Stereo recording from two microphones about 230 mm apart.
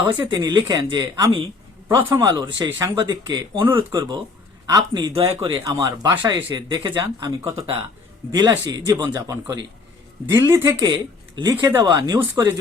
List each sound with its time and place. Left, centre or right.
0.0 s speech: centre